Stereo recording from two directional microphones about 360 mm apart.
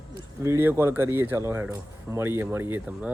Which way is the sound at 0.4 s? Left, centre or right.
Centre.